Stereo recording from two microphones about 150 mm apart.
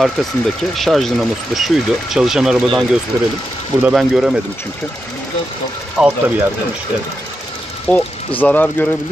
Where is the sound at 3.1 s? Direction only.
25° right (ahead or behind).